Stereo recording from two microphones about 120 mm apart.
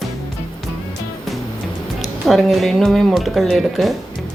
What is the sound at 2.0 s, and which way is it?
Speech, centre (ahead or behind).